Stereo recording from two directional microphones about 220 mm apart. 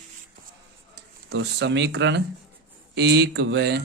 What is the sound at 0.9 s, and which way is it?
Speech, 50° right (ahead or behind).